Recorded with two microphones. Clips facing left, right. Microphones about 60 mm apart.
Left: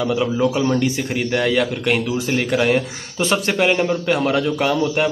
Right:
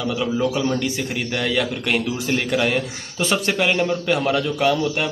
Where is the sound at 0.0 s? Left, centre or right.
Centre.